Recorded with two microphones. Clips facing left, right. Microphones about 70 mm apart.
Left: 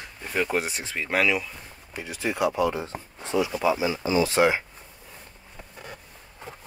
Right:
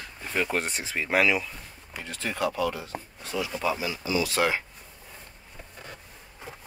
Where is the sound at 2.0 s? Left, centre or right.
Centre.